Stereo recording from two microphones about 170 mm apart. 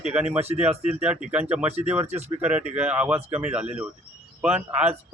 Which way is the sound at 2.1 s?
40° right (ahead or behind).